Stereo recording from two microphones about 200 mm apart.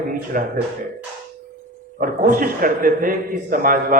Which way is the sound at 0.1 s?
40° right (ahead or behind).